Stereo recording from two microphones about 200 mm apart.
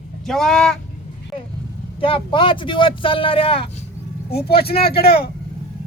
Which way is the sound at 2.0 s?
25° left (ahead or behind).